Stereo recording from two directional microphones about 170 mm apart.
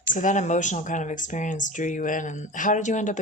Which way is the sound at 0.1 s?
50° left (ahead or behind).